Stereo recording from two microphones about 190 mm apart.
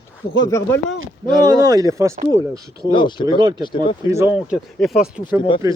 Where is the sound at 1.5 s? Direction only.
20° right (ahead or behind).